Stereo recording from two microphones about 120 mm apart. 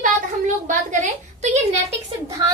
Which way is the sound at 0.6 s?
90° right.